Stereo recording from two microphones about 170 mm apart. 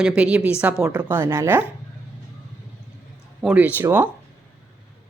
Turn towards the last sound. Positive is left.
turn(degrees=-10)  # may be behind; listen again after turning